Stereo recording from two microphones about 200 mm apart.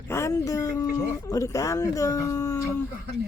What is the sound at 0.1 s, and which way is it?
Speech, 15° left (ahead or behind).